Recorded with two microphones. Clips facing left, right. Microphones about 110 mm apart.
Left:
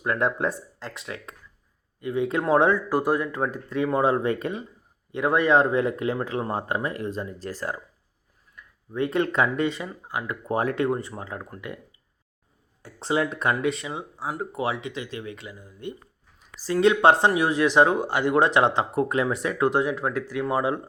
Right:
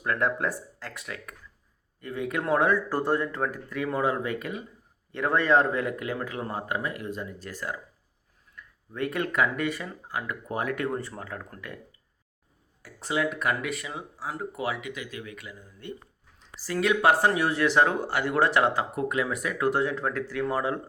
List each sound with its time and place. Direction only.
0.0 s speech: 20° left (ahead or behind)
2.9 s speech: 10° left (ahead or behind); by 4.6 s 30° left (ahead or behind)
5.1 s speech: 15° left (ahead or behind); by 7.8 s 35° left (ahead or behind)
8.5 s speech: 20° left (ahead or behind)
10.5 s speech: 30° left (ahead or behind); by 11.8 s 15° left (ahead or behind)
12.8 s speech: 30° left (ahead or behind)